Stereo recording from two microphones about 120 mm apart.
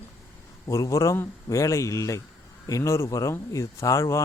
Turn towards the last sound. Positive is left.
turn(degrees=25)  # may be behind; listen again after turning